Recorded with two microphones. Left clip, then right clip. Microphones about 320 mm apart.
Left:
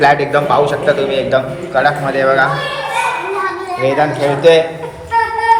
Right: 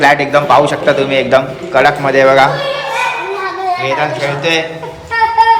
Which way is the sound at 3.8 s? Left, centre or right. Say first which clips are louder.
Left 6 dB; centre.